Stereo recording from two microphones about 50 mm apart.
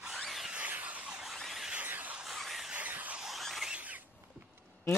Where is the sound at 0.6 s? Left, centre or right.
Right.